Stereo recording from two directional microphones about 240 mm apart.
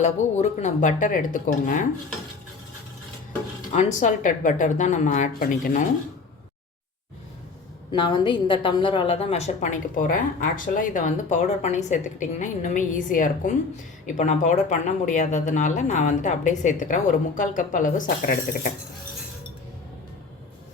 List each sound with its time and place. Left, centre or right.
0.0 s speech: left
3.7 s speech: left
7.9 s a woman's voice: centre